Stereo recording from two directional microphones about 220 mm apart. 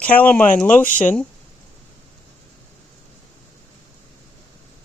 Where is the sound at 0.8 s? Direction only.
35° left (ahead or behind).